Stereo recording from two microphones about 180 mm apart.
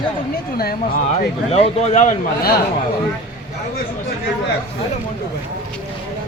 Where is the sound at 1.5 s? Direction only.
35° left (ahead or behind).